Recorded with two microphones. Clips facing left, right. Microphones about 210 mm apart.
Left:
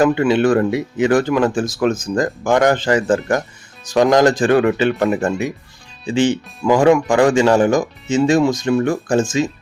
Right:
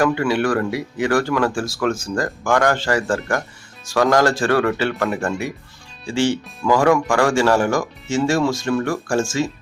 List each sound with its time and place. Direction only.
0.0 s speech: 20° left (ahead or behind)